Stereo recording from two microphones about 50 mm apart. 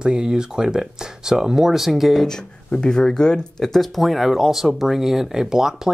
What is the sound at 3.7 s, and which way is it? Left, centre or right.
Speech, centre.